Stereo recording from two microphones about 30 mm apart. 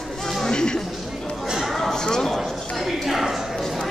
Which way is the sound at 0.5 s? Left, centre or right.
Left.